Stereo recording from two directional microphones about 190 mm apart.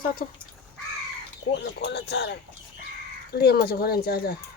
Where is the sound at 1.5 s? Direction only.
65° left (ahead or behind).